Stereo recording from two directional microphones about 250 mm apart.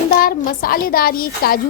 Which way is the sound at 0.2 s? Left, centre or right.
Left.